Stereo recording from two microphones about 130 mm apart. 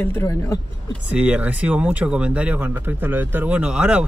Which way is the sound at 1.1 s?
10° right (ahead or behind).